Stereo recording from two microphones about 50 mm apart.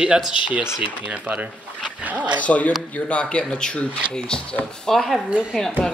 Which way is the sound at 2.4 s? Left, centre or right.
Left.